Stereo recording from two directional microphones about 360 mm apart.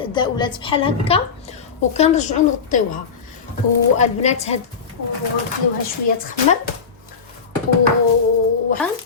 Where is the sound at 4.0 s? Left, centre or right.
Centre.